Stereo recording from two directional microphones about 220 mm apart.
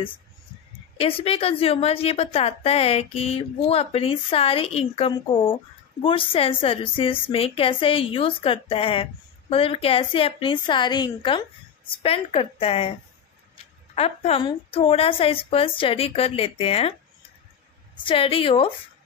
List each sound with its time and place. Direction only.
0.9 s a woman's voice: 25° left (ahead or behind)
13.9 s a woman's voice: 30° left (ahead or behind)
17.9 s a woman's voice: 25° left (ahead or behind)